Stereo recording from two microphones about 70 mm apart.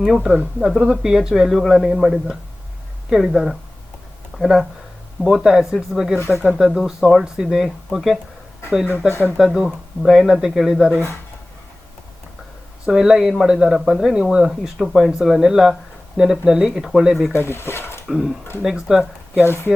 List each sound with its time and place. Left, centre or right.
0.0 s speech: centre
9.4 s speech: centre
12.8 s speech: centre
17.3 s speech: left
18.1 s speech: centre
19.3 s speech: left